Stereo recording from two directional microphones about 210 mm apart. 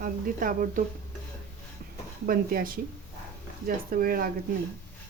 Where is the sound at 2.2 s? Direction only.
40° right (ahead or behind).